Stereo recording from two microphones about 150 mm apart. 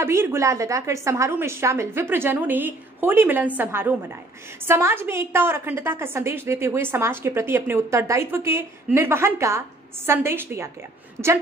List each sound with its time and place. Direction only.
0.0 s a woman's voice: 15° right (ahead or behind)